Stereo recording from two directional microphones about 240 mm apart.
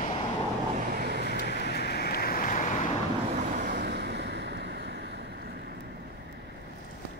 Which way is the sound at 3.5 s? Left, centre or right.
Right.